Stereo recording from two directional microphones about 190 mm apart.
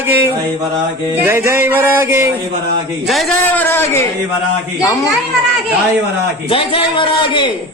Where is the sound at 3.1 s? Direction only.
Centre (ahead or behind); by 5.1 s 15° left (ahead or behind).